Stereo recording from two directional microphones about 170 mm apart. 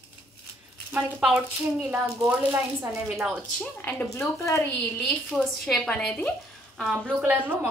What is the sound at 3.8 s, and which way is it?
Speech, 15° left (ahead or behind).